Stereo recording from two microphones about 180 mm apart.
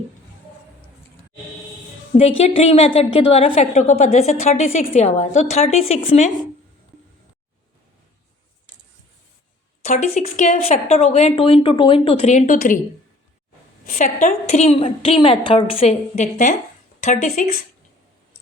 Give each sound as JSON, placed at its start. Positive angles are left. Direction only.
{"t": 2.4, "sound": "a woman's voice", "side_deg": 35}
{"t": 9.8, "sound": "a woman's voice", "side_deg": 40}
{"t": 12.5, "sound": "a woman's voice", "side_deg": 50}
{"t": 13.8, "sound": "a woman's voice", "side_deg": 45}